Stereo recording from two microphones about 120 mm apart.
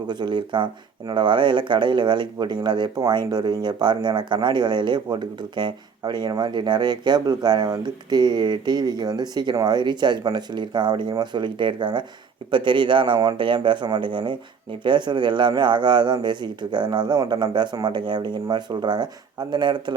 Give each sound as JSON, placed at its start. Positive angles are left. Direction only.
{"t": 0.1, "sound": "speech", "side_deg": -40}